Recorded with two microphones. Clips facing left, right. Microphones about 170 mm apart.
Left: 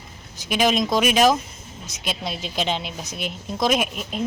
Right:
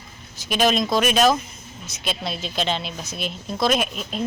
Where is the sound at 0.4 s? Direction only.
15° left (ahead or behind).